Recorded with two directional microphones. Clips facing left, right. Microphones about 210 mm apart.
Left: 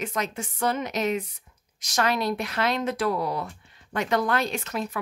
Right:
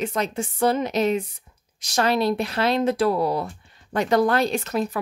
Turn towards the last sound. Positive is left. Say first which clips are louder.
# right 6 dB
turn(degrees=-35)  # may be behind; listen again after turning